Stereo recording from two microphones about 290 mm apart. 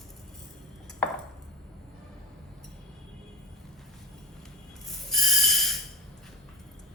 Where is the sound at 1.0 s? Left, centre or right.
Centre.